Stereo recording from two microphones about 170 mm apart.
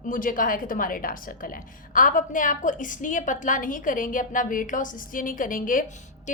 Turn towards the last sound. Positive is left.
turn(degrees=50)  # may be behind; listen again after turning